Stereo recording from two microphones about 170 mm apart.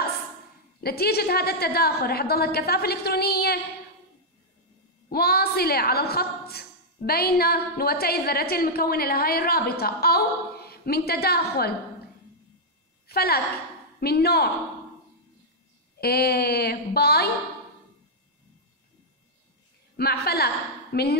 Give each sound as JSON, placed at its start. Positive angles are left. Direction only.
{"t": 0.7, "sound": "a woman's voice", "side_deg": 65}
{"t": 5.1, "sound": "a woman's voice", "side_deg": 65}
{"t": 13.0, "sound": "a woman's voice", "side_deg": 65}
{"t": 16.0, "sound": "a woman's voice", "side_deg": 65}
{"t": 20.0, "sound": "a woman's voice", "side_deg": 65}